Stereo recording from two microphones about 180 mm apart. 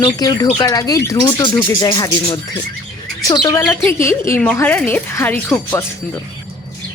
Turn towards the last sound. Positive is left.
turn(degrees=10)  # may be behind; listen again after turning